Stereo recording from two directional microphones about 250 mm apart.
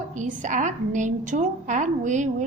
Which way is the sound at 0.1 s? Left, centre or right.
Right.